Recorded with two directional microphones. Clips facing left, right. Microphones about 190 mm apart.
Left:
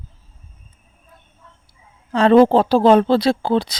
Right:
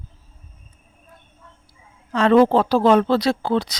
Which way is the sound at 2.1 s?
30° left (ahead or behind).